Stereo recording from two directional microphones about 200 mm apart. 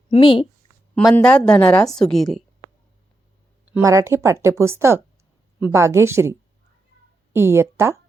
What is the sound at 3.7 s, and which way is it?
A woman's voice, 15° right (ahead or behind).